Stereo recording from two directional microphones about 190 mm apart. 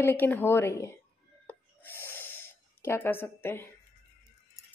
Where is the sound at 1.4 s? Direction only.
10° left (ahead or behind).